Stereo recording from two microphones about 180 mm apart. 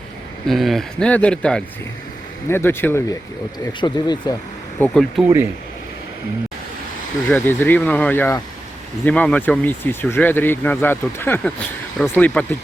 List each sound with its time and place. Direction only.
0.4 s speech: centre (ahead or behind)
3.7 s speech: 25° left (ahead or behind)
4.8 s speech: 5° left (ahead or behind)
7.3 s speech: 10° left (ahead or behind)